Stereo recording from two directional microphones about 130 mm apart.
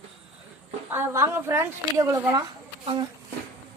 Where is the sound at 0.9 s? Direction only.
20° right (ahead or behind).